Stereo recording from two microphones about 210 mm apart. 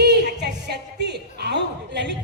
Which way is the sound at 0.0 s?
50° right (ahead or behind).